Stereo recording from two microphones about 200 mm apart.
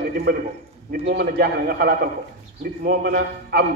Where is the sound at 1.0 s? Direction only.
55° right (ahead or behind).